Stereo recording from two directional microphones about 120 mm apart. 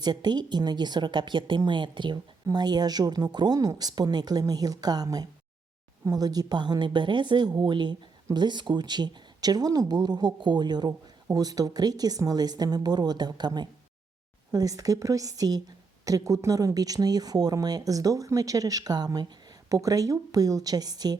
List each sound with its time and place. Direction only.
0.0 s a woman's voice: 35° right (ahead or behind)